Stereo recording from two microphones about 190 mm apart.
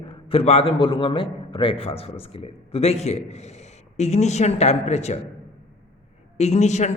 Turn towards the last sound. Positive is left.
turn(degrees=40)  # may be behind; listen again after turning